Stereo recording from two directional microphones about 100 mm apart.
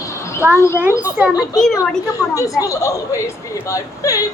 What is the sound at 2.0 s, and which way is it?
A woman's voice, 35° left (ahead or behind).